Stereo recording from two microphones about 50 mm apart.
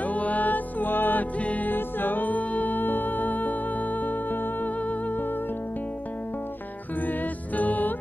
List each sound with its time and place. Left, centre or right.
0.0 s music: left
1.4 s music: left
1.7 s music: left
7.1 s music: left